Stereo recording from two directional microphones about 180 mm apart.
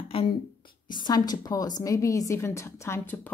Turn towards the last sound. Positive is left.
turn(degrees=15)  # may be behind; listen again after turning